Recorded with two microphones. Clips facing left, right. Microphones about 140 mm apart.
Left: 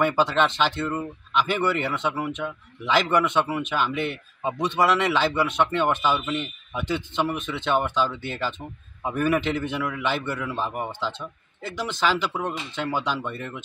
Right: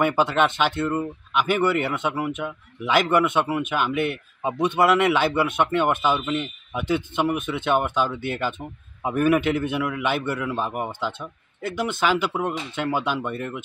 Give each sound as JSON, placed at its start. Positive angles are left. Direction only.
{"t": 0.0, "sound": "speech", "side_deg": -10}
{"t": 11.6, "sound": "speech", "side_deg": -55}
{"t": 12.3, "sound": "speech", "side_deg": -10}